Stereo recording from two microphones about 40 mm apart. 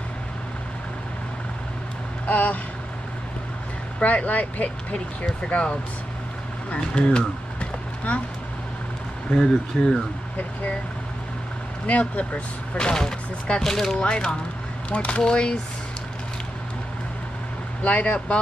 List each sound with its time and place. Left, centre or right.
2.2 s speech: left
4.0 s speech: left
4.9 s speech: left
9.4 s speech: centre
11.8 s speech: left; by 13.9 s centre
13.9 s speech: left
15.2 s speech: left
17.8 s speech: left